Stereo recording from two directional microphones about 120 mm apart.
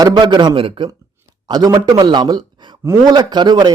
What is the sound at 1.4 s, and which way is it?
Speech, 35° right (ahead or behind).